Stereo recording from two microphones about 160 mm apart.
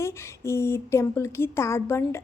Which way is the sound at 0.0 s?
15° left (ahead or behind).